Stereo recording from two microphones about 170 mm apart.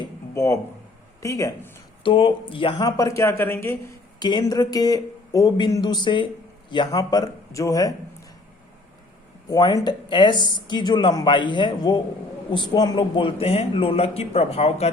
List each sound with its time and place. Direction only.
0.0 s a sound: 15° left (ahead or behind)
1.2 s speech: 20° left (ahead or behind)
2.0 s speech: 30° left (ahead or behind); by 3.8 s 15° left (ahead or behind)
4.2 s speech: 25° left (ahead or behind)
9.5 s a man's voice: 20° left (ahead or behind)